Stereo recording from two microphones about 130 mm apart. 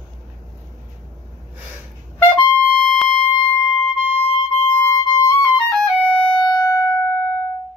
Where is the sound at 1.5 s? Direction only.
10° right (ahead or behind).